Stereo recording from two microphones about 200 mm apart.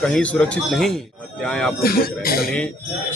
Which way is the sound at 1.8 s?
50° left (ahead or behind).